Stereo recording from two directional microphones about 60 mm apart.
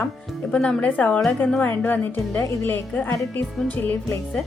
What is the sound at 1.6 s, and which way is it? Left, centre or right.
A woman's voice, left.